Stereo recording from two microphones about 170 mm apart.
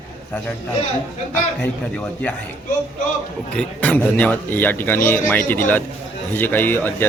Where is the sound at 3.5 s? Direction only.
5° left (ahead or behind).